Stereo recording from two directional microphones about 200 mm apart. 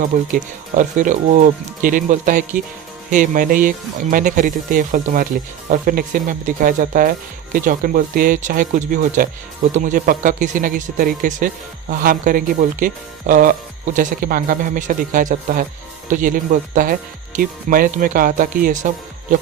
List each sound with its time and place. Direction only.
0.1 s speech: 40° right (ahead or behind)